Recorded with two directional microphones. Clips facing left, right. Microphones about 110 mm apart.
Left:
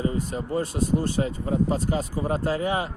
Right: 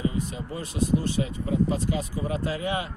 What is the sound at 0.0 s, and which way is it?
Speech, 40° left (ahead or behind).